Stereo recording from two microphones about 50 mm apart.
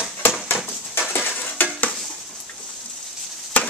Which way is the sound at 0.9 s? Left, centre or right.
Left.